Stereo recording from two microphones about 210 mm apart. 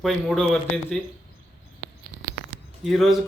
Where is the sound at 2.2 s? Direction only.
20° left (ahead or behind).